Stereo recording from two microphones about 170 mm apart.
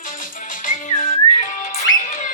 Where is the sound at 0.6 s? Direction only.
50° left (ahead or behind).